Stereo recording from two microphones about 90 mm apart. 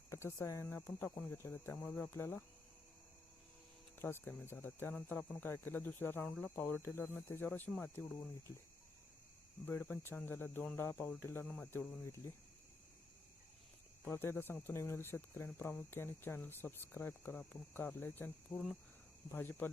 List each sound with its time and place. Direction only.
0.1 s speech: 30° left (ahead or behind)
3.9 s speech: 25° left (ahead or behind)
9.9 s speech: 25° left (ahead or behind)
11.0 s speech: 15° left (ahead or behind)
14.0 s speech: 25° left (ahead or behind)
18.5 s cricket: centre (ahead or behind)
19.3 s speech: 20° left (ahead or behind)